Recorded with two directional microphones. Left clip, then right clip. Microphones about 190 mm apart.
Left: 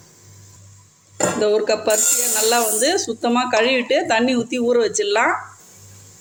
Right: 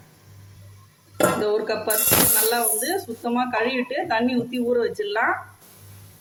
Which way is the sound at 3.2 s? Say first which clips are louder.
Left 6 dB; 50° left (ahead or behind).